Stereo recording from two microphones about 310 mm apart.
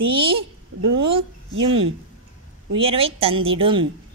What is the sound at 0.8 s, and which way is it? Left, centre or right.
Speech, right.